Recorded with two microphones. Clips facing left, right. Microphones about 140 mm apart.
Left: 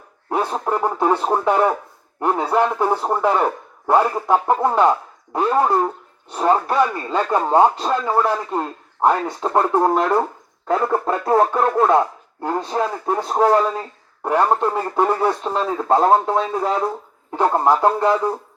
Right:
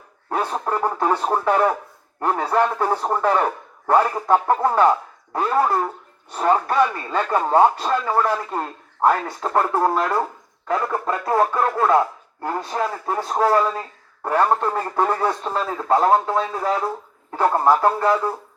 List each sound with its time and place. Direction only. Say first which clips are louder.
0.3 s speech: left 2 dB; 15° left (ahead or behind)
15.6 s speech: left 2 dB; 25° left (ahead or behind)